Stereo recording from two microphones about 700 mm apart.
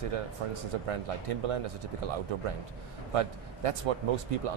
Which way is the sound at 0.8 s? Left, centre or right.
Right.